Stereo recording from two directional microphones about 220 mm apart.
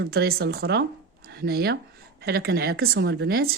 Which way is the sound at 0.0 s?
45° right (ahead or behind).